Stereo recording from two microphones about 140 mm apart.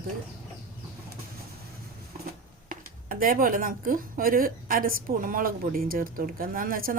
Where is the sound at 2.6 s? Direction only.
90° right.